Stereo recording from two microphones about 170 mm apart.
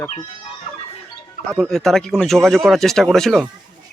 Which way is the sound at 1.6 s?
Centre (ahead or behind).